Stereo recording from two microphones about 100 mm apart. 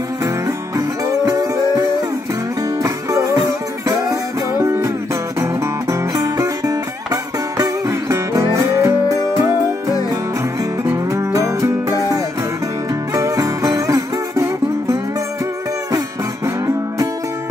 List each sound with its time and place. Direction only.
0.7 s music: 35° right (ahead or behind)
10.9 s music: 30° right (ahead or behind)
13.1 s music: 35° right (ahead or behind)